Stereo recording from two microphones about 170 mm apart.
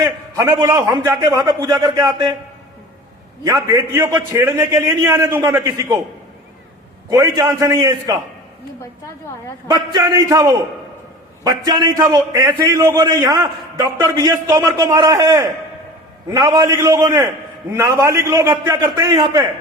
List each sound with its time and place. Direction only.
0.0 s a man's voice: 20° right (ahead or behind)
3.4 s a man's voice: 20° right (ahead or behind)
7.1 s a man's voice: 20° right (ahead or behind)
9.6 s a man's voice: 25° right (ahead or behind)